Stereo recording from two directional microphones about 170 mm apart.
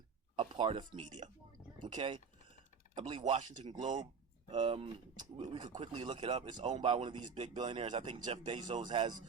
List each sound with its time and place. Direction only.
0.3 s a sound: 30° right (ahead or behind)
0.8 s speech: 45° right (ahead or behind)
1.9 s speech: 30° right (ahead or behind)
3.2 s speech: 45° right (ahead or behind)
3.8 s speech: 25° right (ahead or behind)
7.3 s speech: 40° right (ahead or behind)
7.6 s speech: 30° right (ahead or behind)